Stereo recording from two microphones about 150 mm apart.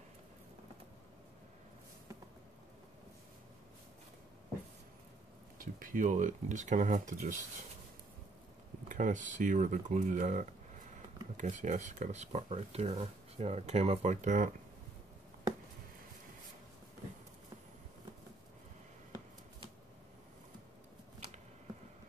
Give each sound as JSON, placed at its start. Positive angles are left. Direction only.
{"t": 5.6, "sound": "speech", "side_deg": -65}
{"t": 8.8, "sound": "speech", "side_deg": -60}
{"t": 14.2, "sound": "speech", "side_deg": -60}